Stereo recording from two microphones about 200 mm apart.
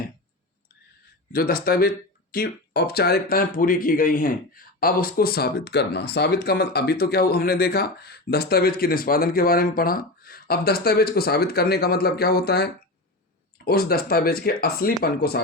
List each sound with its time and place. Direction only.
1.3 s speech: 50° left (ahead or behind)